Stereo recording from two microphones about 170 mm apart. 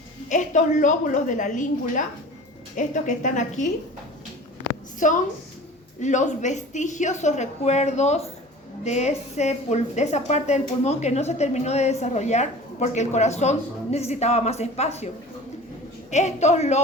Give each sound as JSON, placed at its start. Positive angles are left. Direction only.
{"t": 0.3, "sound": "a woman's voice", "side_deg": 45}
{"t": 4.9, "sound": "a woman's voice", "side_deg": 50}